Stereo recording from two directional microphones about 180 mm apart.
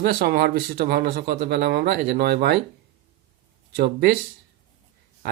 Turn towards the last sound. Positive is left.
turn(degrees=-65)  # may be behind; listen again after turning